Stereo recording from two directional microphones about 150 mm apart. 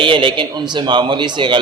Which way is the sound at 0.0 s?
35° right (ahead or behind).